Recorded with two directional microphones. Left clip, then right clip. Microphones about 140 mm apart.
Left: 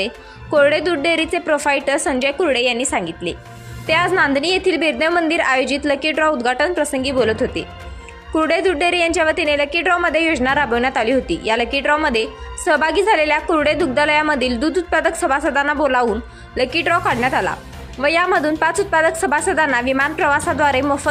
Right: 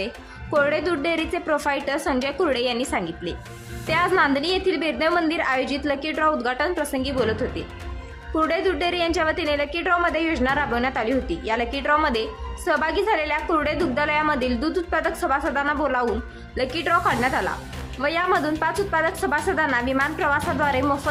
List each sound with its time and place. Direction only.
0.5 s a woman's voice: 25° left (ahead or behind)